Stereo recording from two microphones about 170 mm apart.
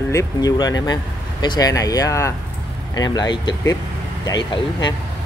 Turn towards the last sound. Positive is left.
turn(degrees=25)  # may be behind; listen again after turning